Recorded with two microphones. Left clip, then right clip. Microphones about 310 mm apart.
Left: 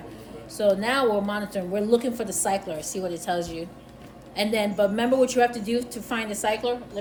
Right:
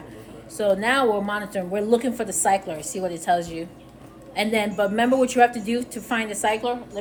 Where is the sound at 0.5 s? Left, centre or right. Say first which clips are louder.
Right 2 dB; right.